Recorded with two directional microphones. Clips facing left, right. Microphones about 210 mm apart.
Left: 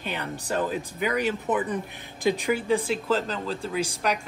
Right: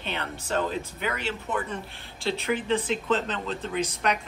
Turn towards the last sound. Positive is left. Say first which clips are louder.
# even
turn(degrees=5)  # may be behind; listen again after turning